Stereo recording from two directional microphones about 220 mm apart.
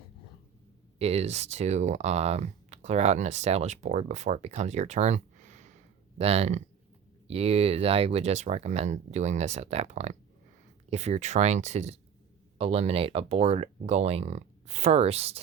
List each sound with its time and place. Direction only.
0.9 s speech: 30° right (ahead or behind)